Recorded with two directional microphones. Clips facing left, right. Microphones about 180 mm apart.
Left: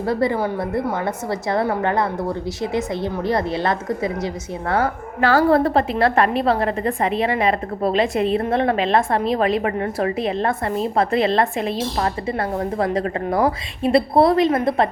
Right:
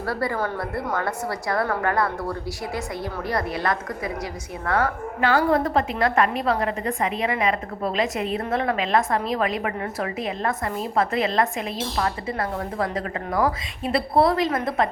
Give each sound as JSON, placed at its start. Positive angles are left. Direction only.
{"t": 0.0, "sound": "a woman's voice", "side_deg": 20}